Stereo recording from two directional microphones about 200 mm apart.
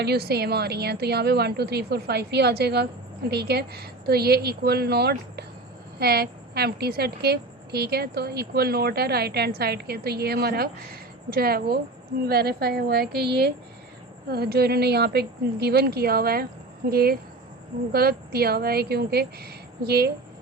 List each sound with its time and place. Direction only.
0.0 s a woman's voice: 55° right (ahead or behind)